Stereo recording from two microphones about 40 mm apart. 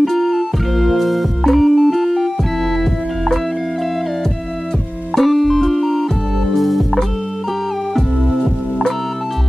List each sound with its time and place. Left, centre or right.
0.0 s music: centre
5.1 s music: centre